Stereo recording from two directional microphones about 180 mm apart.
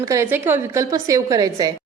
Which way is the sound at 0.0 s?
15° right (ahead or behind).